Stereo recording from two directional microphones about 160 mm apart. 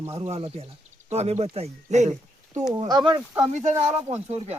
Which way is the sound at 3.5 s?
45° right (ahead or behind).